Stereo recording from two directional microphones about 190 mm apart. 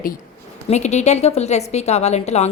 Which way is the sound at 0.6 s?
35° left (ahead or behind).